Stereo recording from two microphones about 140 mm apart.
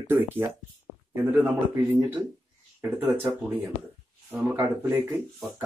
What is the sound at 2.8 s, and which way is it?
Speech, 15° right (ahead or behind).